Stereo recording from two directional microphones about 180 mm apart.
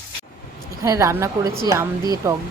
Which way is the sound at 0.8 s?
15° right (ahead or behind).